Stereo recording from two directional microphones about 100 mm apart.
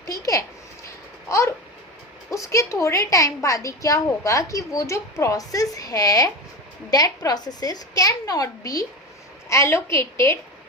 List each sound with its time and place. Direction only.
0.0 s a woman's voice: 35° left (ahead or behind)
1.3 s a sound: 30° left (ahead or behind)
2.3 s a woman's voice: 30° left (ahead or behind)